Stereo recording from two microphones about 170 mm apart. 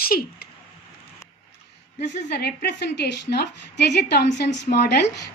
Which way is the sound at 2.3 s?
75° left (ahead or behind).